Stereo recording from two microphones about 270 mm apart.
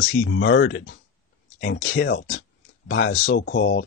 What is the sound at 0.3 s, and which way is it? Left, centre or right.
Speech, left.